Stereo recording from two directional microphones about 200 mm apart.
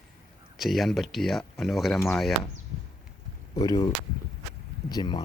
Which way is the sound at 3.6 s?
20° left (ahead or behind).